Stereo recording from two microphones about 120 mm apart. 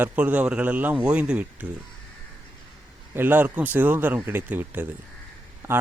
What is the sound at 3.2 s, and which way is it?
A man's voice, 15° right (ahead or behind).